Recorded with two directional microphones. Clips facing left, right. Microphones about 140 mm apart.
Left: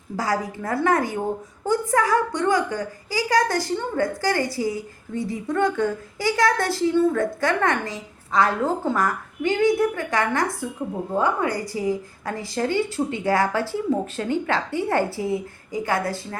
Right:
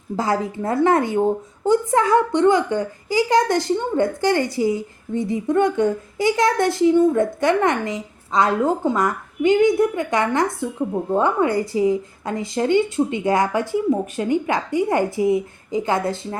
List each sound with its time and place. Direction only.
0.2 s a child's voice: 25° right (ahead or behind)